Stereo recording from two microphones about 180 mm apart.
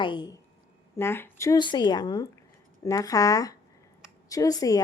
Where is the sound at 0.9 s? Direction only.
15° left (ahead or behind).